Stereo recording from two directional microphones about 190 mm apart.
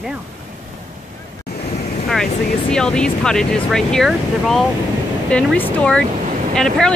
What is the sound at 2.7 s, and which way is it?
Speech, 5° left (ahead or behind).